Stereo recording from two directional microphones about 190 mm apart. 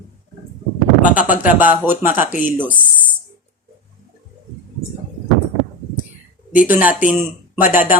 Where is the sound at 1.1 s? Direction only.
45° left (ahead or behind).